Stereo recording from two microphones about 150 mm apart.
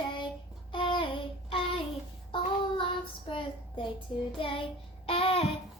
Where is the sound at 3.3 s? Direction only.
35° left (ahead or behind).